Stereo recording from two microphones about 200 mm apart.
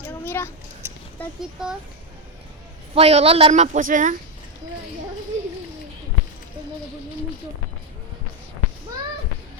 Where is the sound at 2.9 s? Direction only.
30° right (ahead or behind).